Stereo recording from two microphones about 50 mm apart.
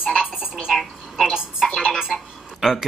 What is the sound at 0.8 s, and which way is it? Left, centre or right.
Speech, centre.